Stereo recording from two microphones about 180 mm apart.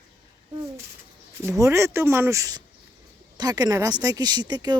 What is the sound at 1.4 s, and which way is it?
Speech, 15° right (ahead or behind).